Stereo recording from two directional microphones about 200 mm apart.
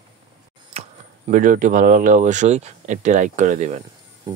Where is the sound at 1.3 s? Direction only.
45° right (ahead or behind).